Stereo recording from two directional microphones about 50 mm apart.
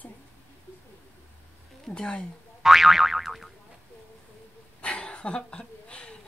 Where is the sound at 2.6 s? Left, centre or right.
Centre.